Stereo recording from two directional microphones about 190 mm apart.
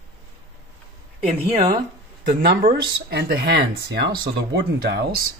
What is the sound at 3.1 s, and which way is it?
Speech, 60° right (ahead or behind).